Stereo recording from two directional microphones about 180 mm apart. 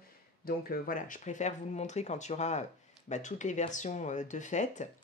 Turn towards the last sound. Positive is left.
turn(degrees=45)  # may be behind; listen again after turning